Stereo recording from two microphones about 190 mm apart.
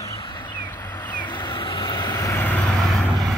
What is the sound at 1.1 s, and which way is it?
Vehicle, 25° left (ahead or behind).